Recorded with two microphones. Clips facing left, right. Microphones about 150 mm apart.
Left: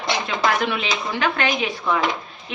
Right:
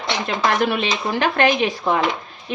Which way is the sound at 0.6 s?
40° right (ahead or behind).